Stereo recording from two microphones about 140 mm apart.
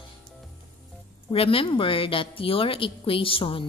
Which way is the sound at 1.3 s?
40° left (ahead or behind).